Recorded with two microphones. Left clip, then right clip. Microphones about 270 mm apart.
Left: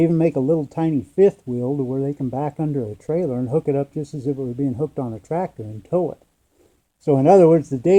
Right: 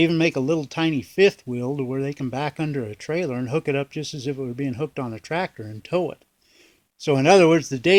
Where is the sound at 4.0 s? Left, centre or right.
Centre.